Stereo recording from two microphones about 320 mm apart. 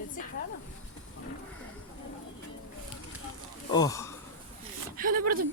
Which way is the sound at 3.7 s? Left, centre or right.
Centre.